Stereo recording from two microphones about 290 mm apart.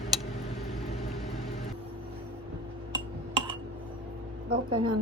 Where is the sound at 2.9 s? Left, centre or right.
Centre.